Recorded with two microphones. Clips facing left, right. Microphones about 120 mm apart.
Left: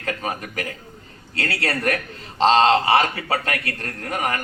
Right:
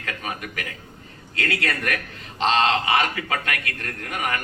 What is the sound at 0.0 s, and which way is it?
A man's voice, 35° left (ahead or behind).